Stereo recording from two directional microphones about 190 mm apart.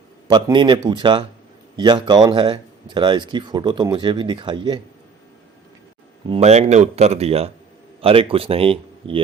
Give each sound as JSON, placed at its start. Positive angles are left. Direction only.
{"t": 0.3, "sound": "speech", "side_deg": -20}
{"t": 6.2, "sound": "speech", "side_deg": -35}